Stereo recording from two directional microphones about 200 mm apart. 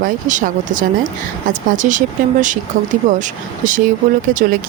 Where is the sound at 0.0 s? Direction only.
40° right (ahead or behind).